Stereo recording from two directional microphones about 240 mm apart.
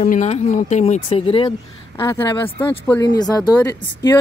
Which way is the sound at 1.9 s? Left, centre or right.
Centre.